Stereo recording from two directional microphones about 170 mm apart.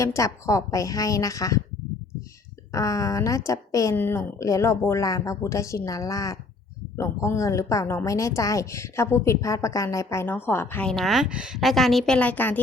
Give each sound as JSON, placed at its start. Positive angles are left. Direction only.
{"t": 0.0, "sound": "a woman's voice", "side_deg": 20}
{"t": 2.7, "sound": "a woman's voice", "side_deg": 20}